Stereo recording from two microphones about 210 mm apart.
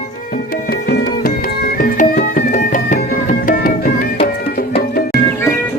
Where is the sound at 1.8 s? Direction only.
40° left (ahead or behind).